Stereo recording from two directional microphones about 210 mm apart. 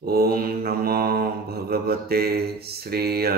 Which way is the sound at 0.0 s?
45° right (ahead or behind).